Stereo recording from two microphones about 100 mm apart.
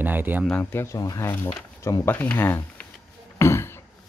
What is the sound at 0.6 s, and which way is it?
Speech, 20° left (ahead or behind).